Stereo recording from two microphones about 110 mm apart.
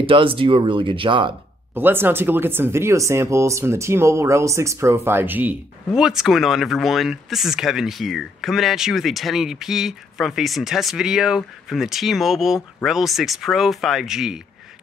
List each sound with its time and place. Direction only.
0.0 s speech: 55° right (ahead or behind)
1.8 s speech: 20° right (ahead or behind)
5.9 s speech: 5° right (ahead or behind)